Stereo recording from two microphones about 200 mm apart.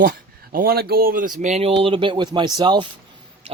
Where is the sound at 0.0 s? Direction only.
45° right (ahead or behind).